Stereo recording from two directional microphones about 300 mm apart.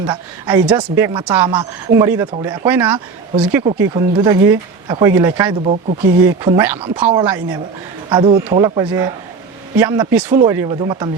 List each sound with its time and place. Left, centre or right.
0.0 s speech: centre
3.3 s speech: centre